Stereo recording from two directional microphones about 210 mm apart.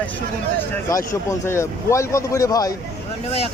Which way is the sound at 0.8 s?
15° left (ahead or behind).